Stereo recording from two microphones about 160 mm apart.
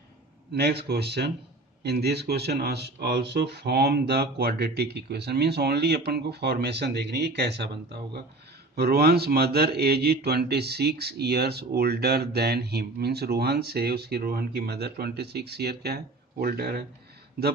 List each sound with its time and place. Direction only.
0.5 s a man's voice: 90° right